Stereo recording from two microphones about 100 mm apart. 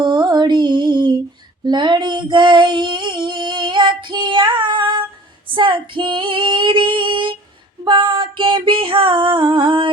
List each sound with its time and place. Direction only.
0.0 s music: 45° right (ahead or behind)
1.6 s female singing: 50° right (ahead or behind)
7.9 s music: 55° right (ahead or behind)